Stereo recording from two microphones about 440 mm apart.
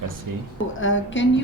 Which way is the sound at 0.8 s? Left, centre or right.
Left.